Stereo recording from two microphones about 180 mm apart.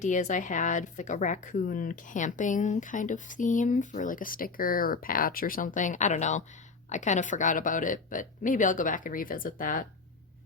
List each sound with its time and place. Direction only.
0.0 s a woman's voice: 45° left (ahead or behind)